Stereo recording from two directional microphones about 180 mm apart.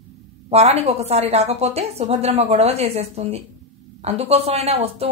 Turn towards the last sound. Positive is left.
turn(degrees=-35)  # may be behind; listen again after turning